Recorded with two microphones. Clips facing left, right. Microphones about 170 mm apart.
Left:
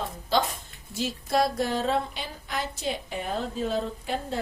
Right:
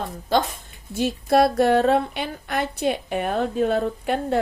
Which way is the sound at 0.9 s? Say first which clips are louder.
Right 7 dB; 60° right (ahead or behind).